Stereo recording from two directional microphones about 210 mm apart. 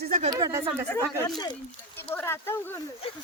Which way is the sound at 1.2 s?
20° left (ahead or behind).